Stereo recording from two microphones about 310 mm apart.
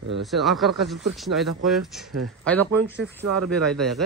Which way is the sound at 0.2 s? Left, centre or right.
Centre.